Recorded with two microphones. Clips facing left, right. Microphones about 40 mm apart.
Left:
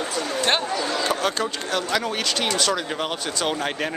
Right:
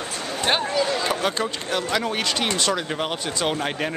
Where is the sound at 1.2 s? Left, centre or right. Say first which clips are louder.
Even; centre.